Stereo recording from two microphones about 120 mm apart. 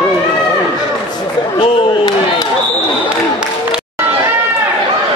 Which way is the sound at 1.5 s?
40° left (ahead or behind).